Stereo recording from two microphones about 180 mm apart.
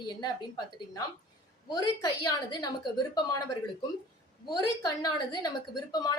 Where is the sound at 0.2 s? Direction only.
20° left (ahead or behind).